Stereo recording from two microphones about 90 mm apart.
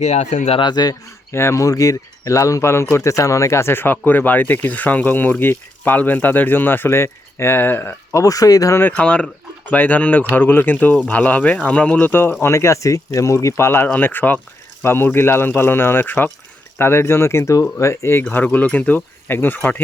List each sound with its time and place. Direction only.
0.6 s speech: 50° left (ahead or behind)
1.3 s speech: 30° left (ahead or behind)
8.1 s speech: 40° left (ahead or behind)
8.8 s speech: 15° left (ahead or behind)